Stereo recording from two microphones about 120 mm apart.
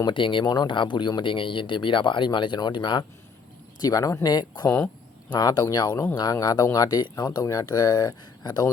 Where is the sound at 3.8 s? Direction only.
30° left (ahead or behind).